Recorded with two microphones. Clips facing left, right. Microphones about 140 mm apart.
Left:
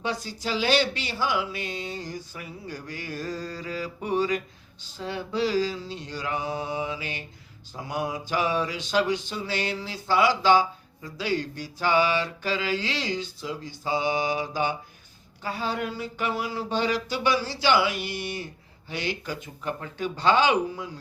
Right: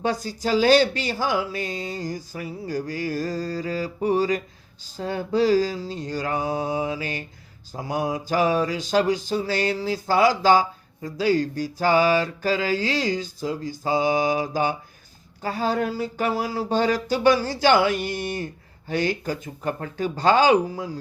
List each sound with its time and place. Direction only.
0.0 s speech: 45° right (ahead or behind)
15.4 s a sound: 40° right (ahead or behind)
18.9 s speech: 45° right (ahead or behind)